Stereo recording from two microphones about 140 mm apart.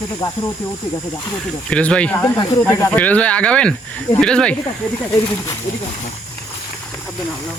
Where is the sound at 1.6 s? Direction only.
10° left (ahead or behind).